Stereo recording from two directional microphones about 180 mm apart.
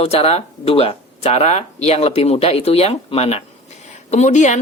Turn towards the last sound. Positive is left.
turn(degrees=40)  # may be behind; listen again after turning